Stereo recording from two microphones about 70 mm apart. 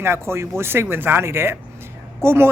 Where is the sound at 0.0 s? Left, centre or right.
Right.